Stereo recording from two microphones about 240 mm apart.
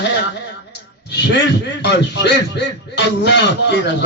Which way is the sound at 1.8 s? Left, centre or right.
Left.